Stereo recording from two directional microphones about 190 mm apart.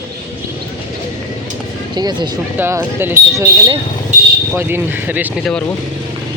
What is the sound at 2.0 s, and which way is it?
Speech, 20° right (ahead or behind).